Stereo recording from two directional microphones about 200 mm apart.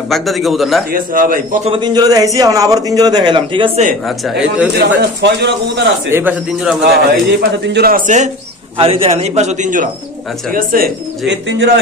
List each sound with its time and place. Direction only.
0.1 s a man's voice: centre (ahead or behind)
0.9 s a man's voice: 45° right (ahead or behind)
1.7 s a man's voice: 20° right (ahead or behind)
4.7 s speech: 55° right (ahead or behind)
6.0 s speech: 10° right (ahead or behind)
6.8 s a man's voice: 55° right (ahead or behind); by 8.3 s 40° right (ahead or behind)
8.7 s a man's voice: 30° right (ahead or behind); by 11.3 s 45° right (ahead or behind)
11.4 s speech: 65° right (ahead or behind)